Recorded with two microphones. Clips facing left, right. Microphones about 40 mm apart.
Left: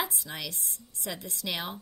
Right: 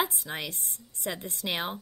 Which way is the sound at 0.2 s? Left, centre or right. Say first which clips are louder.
Right 2 dB; right.